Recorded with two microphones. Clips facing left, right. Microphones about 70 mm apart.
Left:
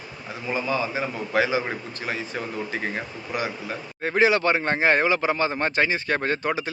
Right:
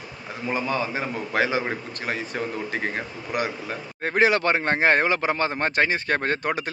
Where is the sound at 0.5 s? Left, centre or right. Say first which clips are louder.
Left 1 dB; right.